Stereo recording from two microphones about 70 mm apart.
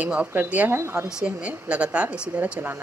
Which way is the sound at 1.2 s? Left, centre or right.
Centre.